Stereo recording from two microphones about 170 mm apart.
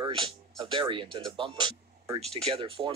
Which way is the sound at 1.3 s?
30° right (ahead or behind).